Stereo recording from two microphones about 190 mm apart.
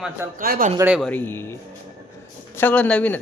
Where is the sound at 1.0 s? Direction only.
10° left (ahead or behind).